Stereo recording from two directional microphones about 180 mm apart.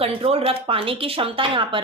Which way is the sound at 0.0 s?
30° right (ahead or behind).